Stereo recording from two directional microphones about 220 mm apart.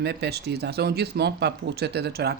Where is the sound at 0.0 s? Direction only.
50° right (ahead or behind).